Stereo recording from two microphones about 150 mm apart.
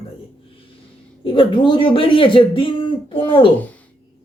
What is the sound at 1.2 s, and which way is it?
Speech, 35° left (ahead or behind).